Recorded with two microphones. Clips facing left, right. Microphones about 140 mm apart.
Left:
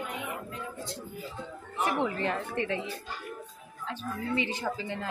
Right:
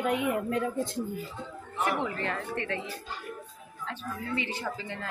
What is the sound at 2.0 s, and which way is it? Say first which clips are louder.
Speech: left 2 dB; 20° left (ahead or behind).